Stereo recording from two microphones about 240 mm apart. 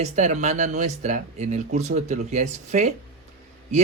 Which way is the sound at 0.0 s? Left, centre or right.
Right.